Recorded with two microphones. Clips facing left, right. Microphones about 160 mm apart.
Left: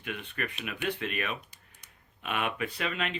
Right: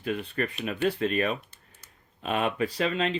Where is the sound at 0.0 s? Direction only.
35° right (ahead or behind).